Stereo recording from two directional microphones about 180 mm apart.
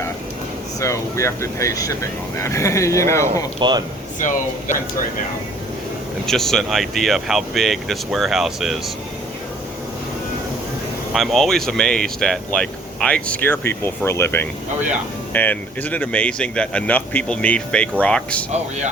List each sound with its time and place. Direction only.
0.8 s speech: 15° left (ahead or behind)
3.6 s speech: 25° right (ahead or behind)
6.2 s speech: centre (ahead or behind)
11.1 s speech: centre (ahead or behind)